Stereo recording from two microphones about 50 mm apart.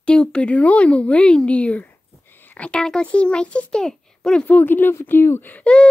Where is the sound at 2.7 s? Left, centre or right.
Centre.